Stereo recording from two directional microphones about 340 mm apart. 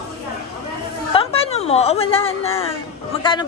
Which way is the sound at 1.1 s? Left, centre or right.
Centre.